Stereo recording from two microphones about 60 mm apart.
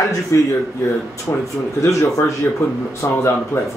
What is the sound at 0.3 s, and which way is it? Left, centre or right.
Speech, left.